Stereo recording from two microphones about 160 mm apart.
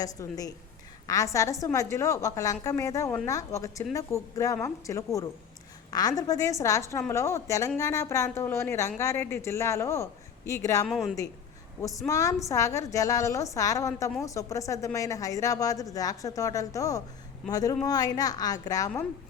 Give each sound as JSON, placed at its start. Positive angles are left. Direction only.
{"t": 0.0, "sound": "a woman's voice", "side_deg": 20}
{"t": 10.8, "sound": "a woman's voice", "side_deg": 0}
{"t": 12.0, "sound": "a woman's voice", "side_deg": 20}